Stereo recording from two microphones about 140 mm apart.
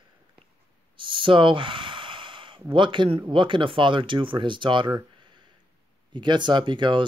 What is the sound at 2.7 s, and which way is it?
Speech, 35° right (ahead or behind).